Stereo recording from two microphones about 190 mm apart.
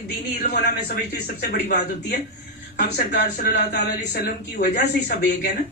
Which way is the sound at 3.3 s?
60° left (ahead or behind).